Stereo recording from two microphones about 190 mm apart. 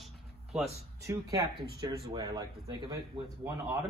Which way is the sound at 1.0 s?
15° right (ahead or behind).